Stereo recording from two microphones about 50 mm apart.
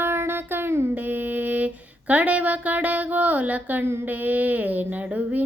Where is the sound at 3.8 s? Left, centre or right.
Right.